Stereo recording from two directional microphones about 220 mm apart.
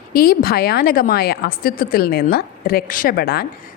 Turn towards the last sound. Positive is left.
turn(degrees=45)  # may be behind; listen again after turning